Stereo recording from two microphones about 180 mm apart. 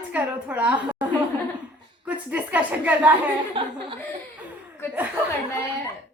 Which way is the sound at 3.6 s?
30° right (ahead or behind).